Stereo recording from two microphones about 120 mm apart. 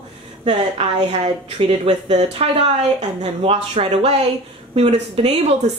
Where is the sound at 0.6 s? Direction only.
65° right (ahead or behind).